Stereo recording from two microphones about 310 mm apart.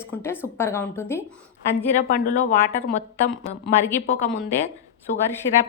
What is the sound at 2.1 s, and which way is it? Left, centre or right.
Speech, left.